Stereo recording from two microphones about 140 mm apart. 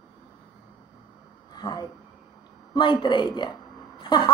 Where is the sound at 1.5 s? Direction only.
30° left (ahead or behind).